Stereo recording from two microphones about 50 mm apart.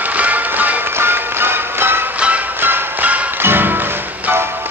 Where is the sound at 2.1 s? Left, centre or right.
Right.